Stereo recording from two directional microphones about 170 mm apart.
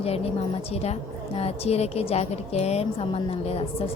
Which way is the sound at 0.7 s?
35° left (ahead or behind).